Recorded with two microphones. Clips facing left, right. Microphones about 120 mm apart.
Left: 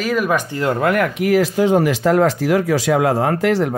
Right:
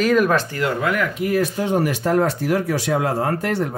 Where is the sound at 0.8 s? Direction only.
60° left (ahead or behind).